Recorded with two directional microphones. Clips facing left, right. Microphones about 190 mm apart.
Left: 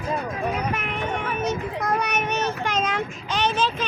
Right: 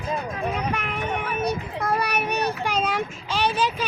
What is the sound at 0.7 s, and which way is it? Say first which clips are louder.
Vehicle: even; 5° left (ahead or behind).